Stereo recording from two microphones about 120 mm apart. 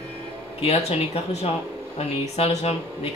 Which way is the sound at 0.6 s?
60° left (ahead or behind).